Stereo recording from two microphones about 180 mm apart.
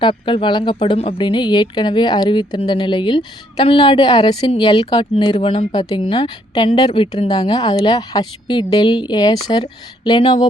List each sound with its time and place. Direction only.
0.0 s speech: 25° left (ahead or behind)